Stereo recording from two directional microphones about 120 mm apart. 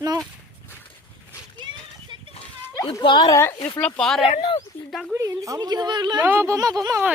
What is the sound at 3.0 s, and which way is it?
Speech, 40° left (ahead or behind).